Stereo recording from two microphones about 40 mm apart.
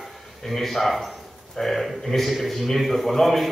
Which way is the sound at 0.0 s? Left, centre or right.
Centre.